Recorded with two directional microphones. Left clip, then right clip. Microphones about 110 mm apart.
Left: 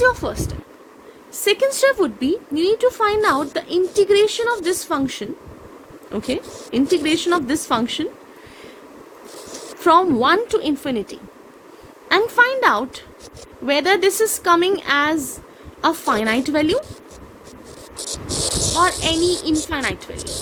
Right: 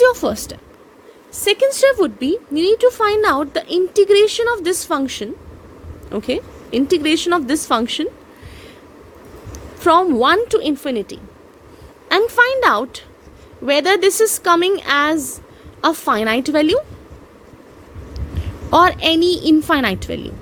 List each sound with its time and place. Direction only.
0.0 s a sound: 55° right (ahead or behind)
1.4 s speech: 30° right (ahead or behind)
2.0 s a woman's voice: 45° right (ahead or behind)
9.8 s a woman's voice: 45° right (ahead or behind); by 16.8 s 60° right (ahead or behind)
18.8 s speech: 55° right (ahead or behind)